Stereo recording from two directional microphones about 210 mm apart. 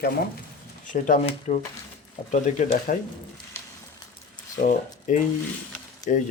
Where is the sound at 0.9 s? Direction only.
40° left (ahead or behind).